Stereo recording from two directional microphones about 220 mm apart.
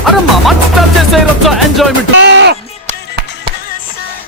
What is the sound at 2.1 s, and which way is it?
Speech, 55° right (ahead or behind).